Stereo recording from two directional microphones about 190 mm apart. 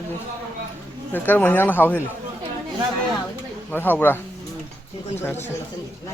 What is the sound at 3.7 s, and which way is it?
Speech, 10° left (ahead or behind).